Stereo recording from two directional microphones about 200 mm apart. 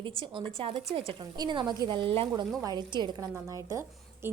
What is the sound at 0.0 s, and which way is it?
A woman's voice, 25° right (ahead or behind).